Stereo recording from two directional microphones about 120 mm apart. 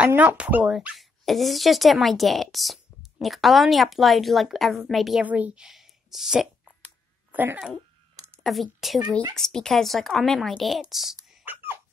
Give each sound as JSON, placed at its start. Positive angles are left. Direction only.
{"t": 0.0, "sound": "speech", "side_deg": -15}
{"t": 5.2, "sound": "a woman's voice", "side_deg": -15}
{"t": 7.3, "sound": "speech", "side_deg": -15}
{"t": 8.5, "sound": "speech", "side_deg": 0}
{"t": 11.4, "sound": "a sound", "side_deg": -20}